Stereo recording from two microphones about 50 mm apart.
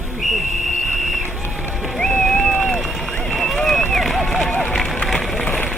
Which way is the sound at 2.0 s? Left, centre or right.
Centre.